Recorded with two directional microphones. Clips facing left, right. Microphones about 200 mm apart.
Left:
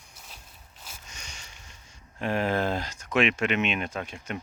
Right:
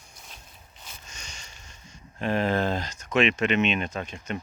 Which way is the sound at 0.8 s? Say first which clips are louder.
Even; 10° left (ahead or behind).